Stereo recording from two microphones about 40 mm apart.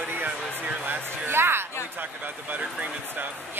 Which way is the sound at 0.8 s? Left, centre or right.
Right.